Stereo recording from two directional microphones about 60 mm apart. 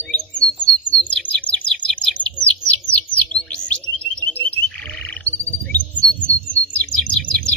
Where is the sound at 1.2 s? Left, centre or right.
Left.